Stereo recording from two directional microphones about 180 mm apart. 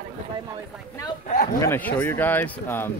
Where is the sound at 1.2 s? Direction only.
45° left (ahead or behind).